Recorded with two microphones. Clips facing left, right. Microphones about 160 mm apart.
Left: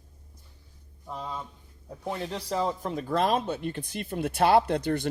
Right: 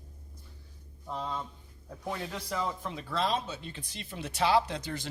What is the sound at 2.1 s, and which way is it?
Speech, 30° left (ahead or behind).